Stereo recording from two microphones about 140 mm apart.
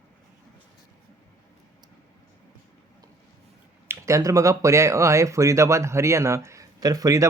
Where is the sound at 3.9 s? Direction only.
20° right (ahead or behind).